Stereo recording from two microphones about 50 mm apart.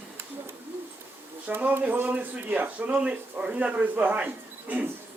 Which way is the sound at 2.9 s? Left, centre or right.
Right.